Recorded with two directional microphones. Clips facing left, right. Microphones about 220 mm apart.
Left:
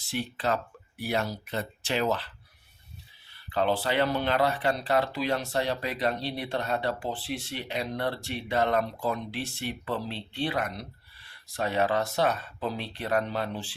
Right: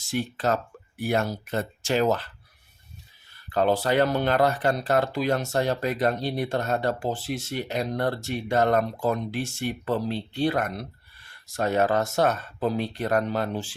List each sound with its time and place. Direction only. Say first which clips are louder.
0.0 s speech: right 4 dB; 45° right (ahead or behind)
3.5 s speech: right 4 dB; 45° right (ahead or behind)